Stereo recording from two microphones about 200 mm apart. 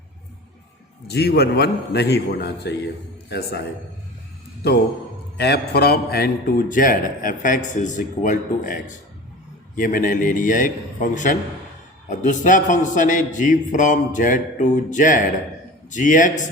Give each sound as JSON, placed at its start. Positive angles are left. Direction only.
{"t": 1.0, "sound": "a man's voice", "side_deg": 55}
{"t": 5.4, "sound": "a man's voice", "side_deg": 55}